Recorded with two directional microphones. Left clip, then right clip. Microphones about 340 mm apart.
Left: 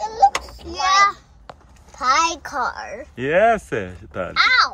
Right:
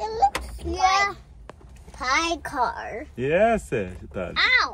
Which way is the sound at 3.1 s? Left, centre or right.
Centre.